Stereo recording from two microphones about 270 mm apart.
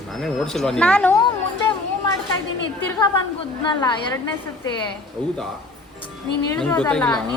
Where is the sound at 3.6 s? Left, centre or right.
Centre.